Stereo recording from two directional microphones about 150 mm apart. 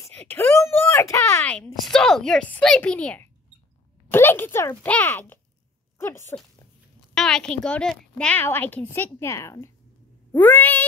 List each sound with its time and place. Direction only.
0.0 s a woman's voice: 10° left (ahead or behind)
7.2 s a woman's voice: 5° left (ahead or behind)